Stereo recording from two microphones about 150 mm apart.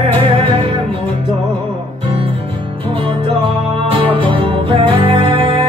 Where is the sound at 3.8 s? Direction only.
35° right (ahead or behind).